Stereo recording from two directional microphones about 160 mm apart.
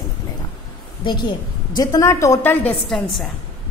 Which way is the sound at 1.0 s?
30° left (ahead or behind).